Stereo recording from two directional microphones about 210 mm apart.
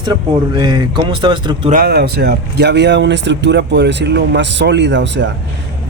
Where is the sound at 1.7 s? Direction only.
50° right (ahead or behind).